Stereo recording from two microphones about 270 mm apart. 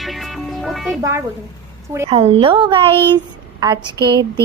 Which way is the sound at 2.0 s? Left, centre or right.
Right.